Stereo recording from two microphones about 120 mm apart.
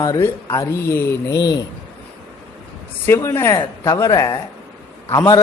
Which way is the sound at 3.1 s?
20° left (ahead or behind).